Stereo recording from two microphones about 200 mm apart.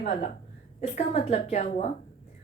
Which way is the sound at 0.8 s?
30° left (ahead or behind).